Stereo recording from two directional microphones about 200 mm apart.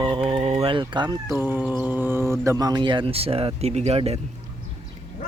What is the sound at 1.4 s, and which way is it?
Speech, 10° right (ahead or behind).